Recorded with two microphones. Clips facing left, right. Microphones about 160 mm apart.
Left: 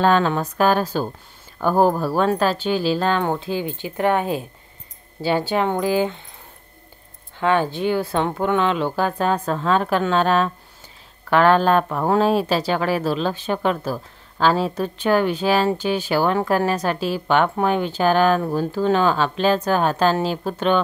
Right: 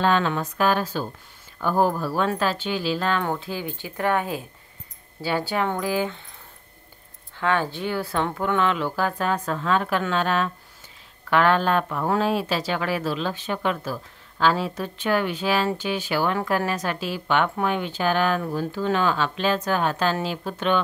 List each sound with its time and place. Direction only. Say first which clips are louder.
0.0 s speech: left 4 dB; 40° left (ahead or behind); by 6.2 s 25° left (ahead or behind)
7.3 s speech: left 4 dB; 20° left (ahead or behind); by 20.8 s 35° left (ahead or behind)